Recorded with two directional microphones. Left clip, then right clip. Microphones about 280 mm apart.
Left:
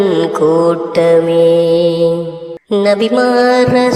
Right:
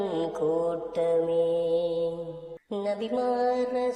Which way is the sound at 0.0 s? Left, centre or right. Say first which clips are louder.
Left 16 dB; left.